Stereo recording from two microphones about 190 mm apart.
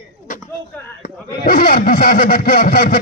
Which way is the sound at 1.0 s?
40° left (ahead or behind).